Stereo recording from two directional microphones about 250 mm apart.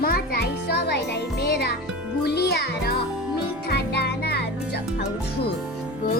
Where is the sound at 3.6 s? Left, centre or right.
Left.